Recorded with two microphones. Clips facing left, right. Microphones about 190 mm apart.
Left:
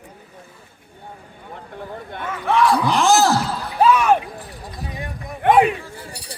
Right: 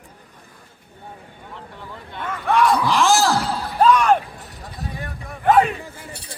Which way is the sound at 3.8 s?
5° left (ahead or behind).